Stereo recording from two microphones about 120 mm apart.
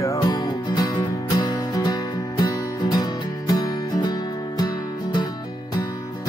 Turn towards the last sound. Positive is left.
turn(degrees=35)  # may be behind; listen again after turning